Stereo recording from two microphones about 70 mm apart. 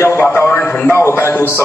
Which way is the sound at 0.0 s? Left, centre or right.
Left.